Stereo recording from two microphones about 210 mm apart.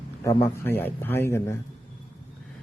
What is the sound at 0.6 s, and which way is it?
Speech, 10° left (ahead or behind).